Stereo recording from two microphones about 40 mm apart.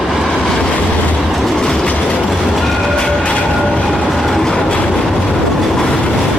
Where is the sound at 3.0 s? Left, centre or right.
Centre.